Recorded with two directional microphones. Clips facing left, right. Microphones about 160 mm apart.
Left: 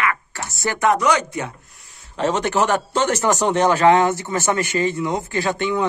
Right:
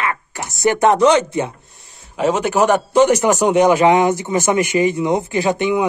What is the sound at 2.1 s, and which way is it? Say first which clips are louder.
A man's voice: right 3 dB; 10° right (ahead or behind).